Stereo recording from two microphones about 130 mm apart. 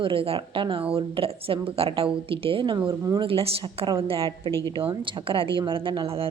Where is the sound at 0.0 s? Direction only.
45° right (ahead or behind).